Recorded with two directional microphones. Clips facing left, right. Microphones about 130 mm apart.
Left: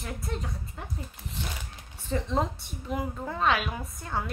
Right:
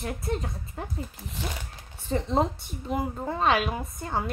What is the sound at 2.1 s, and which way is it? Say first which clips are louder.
A woman's voice: right 3 dB; 30° right (ahead or behind).